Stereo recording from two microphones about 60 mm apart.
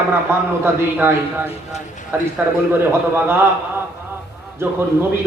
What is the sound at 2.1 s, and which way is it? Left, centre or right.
A man's voice, right.